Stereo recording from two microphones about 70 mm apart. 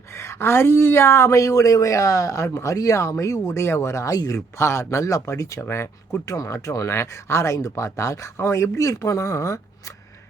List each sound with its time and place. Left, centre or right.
0.1 s a woman's voice: left
4.5 s a woman's voice: left
6.2 s a woman's voice: left